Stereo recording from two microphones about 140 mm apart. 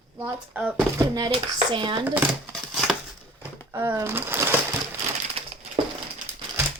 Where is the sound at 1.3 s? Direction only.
35° right (ahead or behind).